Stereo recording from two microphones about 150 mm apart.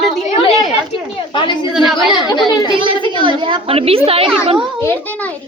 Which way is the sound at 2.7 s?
35° right (ahead or behind).